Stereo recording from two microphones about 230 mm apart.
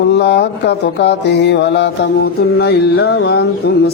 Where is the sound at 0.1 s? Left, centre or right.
Left.